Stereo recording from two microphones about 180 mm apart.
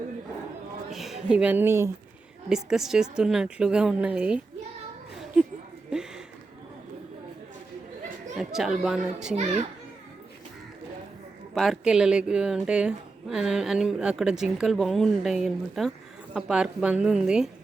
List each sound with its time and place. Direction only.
0.9 s speech: centre (ahead or behind)
2.6 s a woman's voice: centre (ahead or behind)
5.2 s a sound: 5° right (ahead or behind)
8.4 s a woman's voice: centre (ahead or behind)
9.3 s a child's voice: 40° right (ahead or behind)
11.5 s a woman's voice: centre (ahead or behind)